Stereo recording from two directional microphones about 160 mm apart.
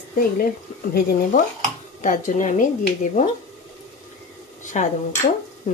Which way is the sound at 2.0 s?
50° left (ahead or behind).